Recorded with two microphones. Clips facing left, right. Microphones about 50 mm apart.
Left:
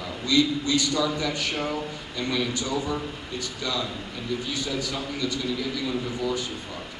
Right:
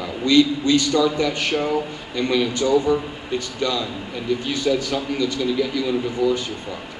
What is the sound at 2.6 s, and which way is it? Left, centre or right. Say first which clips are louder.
Speech: right 10 dB; right.